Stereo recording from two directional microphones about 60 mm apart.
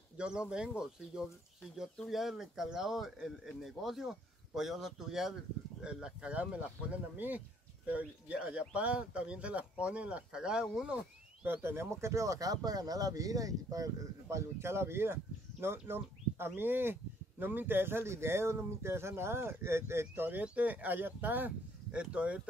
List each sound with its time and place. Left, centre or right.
0.2 s speech: centre
11.4 s speech: right
14.6 s speech: right
20.5 s speech: right